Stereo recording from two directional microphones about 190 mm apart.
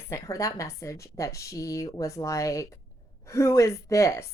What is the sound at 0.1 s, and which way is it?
Speech, 15° left (ahead or behind).